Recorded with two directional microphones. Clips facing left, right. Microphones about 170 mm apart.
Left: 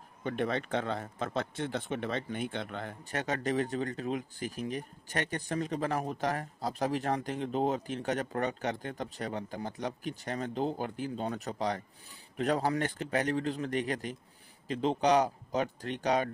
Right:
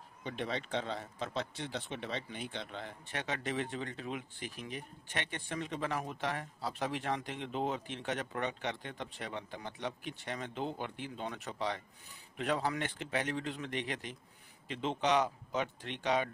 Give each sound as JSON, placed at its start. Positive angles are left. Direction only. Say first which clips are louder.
{"t": 0.2, "sound": "speech", "louder": "left 6 dB", "side_deg": 50}